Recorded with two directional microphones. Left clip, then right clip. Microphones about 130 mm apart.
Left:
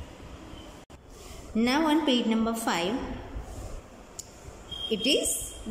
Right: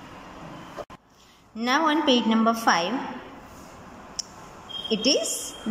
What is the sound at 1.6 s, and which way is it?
A woman's voice, 15° left (ahead or behind).